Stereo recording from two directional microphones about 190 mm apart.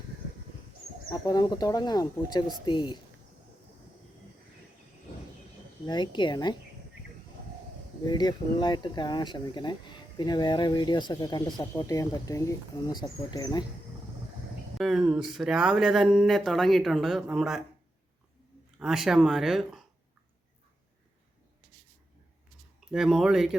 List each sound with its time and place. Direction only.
1.1 s speech: 20° left (ahead or behind)
5.8 s speech: 25° left (ahead or behind)
8.0 s speech: 20° left (ahead or behind)
14.8 s speech: centre (ahead or behind)
18.8 s speech: centre (ahead or behind)
22.9 s speech: 5° right (ahead or behind)